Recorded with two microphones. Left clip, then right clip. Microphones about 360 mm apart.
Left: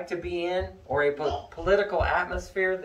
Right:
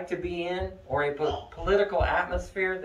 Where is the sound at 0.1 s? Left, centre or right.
Centre.